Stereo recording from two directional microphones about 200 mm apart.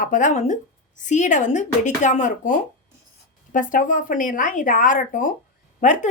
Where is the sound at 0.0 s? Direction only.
40° left (ahead or behind).